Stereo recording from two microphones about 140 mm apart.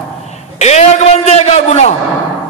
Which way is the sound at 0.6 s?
50° left (ahead or behind).